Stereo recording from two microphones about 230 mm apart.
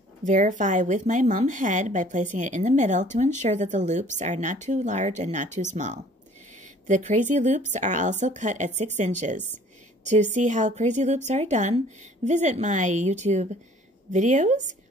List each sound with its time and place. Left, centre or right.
0.2 s a woman's voice: right